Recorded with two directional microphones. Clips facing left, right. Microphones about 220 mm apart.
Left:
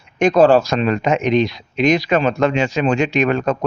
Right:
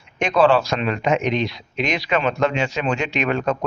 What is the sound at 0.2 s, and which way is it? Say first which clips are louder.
Speech: left 5 dB; 45° left (ahead or behind).